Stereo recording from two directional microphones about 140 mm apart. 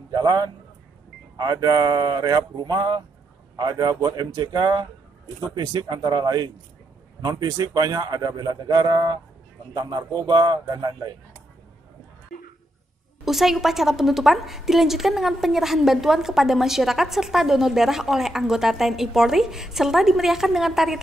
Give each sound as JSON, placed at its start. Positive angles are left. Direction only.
{"t": 0.1, "sound": "a man's voice", "side_deg": -30}
{"t": 13.2, "sound": "a woman's voice", "side_deg": 0}